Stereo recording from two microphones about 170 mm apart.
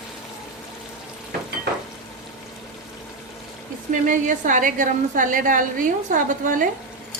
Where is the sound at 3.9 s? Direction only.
50° right (ahead or behind).